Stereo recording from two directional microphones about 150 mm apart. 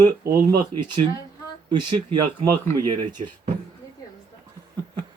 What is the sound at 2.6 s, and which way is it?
Speech, 20° left (ahead or behind).